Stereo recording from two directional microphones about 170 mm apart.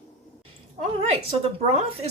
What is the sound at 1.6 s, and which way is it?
Speech, 40° right (ahead or behind).